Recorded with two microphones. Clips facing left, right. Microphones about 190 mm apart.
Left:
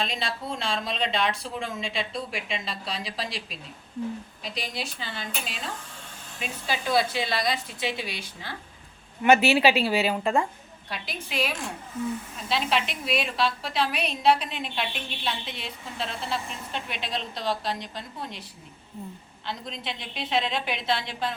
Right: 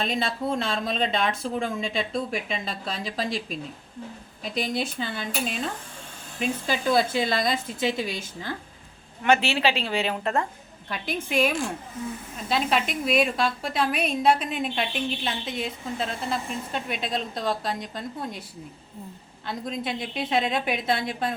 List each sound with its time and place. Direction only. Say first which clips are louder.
0.0 s speech: right 4 dB; 50° right (ahead or behind)
9.2 s a woman's voice: left 3 dB; 10° left (ahead or behind)
10.8 s speech: right 6 dB; 50° right (ahead or behind)
19.5 s speech: right 5 dB; 50° right (ahead or behind)